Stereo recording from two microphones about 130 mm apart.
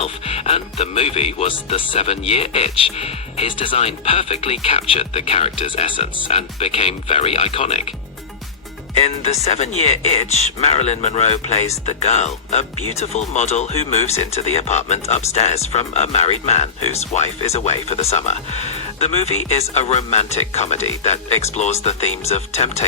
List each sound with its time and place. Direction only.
0.0 s speech: 50° left (ahead or behind)
9.0 s speech: 55° left (ahead or behind)